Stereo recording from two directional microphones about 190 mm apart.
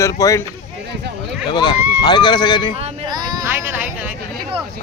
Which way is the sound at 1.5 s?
20° left (ahead or behind).